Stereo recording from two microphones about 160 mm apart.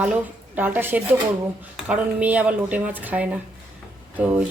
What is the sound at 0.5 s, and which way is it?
Speech, 10° right (ahead or behind).